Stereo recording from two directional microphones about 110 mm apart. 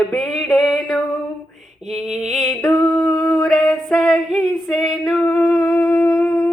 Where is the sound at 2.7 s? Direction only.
20° left (ahead or behind).